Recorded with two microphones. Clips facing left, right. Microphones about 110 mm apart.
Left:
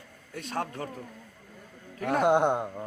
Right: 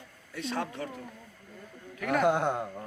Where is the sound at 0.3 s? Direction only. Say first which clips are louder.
Even; 50° left (ahead or behind).